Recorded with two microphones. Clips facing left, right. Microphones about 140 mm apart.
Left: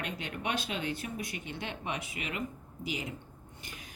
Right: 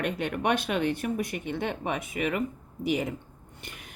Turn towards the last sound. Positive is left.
turn(degrees=-60)  # may be behind; listen again after turning